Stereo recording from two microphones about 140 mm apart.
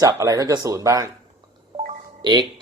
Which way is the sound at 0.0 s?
25° right (ahead or behind).